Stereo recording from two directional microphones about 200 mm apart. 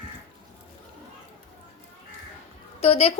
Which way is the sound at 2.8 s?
30° left (ahead or behind).